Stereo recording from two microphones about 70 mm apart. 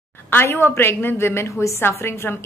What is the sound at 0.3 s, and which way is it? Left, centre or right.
Speech, left.